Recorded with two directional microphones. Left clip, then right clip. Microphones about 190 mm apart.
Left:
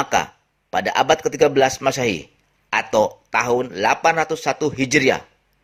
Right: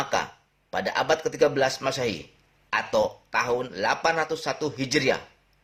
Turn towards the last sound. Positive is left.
turn(degrees=40)  # may be behind; listen again after turning